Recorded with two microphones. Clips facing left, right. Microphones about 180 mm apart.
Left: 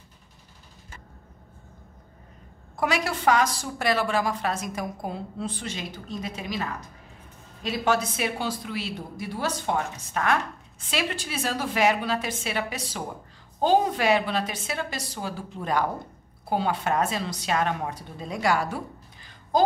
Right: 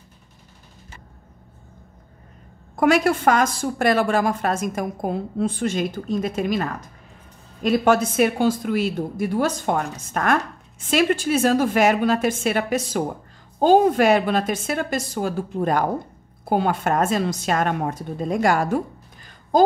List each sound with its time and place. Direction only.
2.7 s a woman's voice: 50° right (ahead or behind)